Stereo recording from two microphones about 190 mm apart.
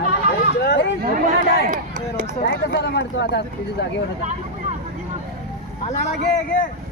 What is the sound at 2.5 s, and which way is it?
Speech, 60° left (ahead or behind).